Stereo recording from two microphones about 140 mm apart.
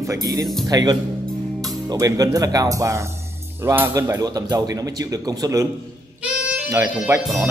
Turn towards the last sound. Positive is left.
turn(degrees=-20)  # may be behind; listen again after turning